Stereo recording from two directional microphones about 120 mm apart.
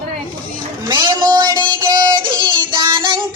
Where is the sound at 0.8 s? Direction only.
40° right (ahead or behind).